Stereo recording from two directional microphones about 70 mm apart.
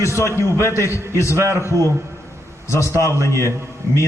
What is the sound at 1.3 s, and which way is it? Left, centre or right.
Speech, right.